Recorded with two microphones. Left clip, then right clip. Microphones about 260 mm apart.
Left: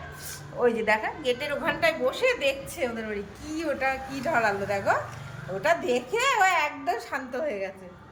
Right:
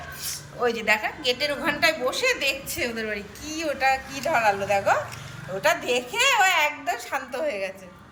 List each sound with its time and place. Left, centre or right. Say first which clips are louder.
0.6 s a woman's voice: right 1 dB; centre